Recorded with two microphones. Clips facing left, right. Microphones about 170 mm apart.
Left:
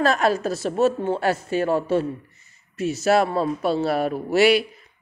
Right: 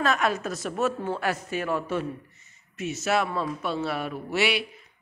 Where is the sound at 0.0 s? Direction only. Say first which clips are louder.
Left 5 dB; 35° left (ahead or behind).